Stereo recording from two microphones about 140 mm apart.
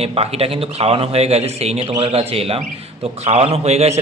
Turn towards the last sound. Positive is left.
turn(degrees=-50)  # may be behind; listen again after turning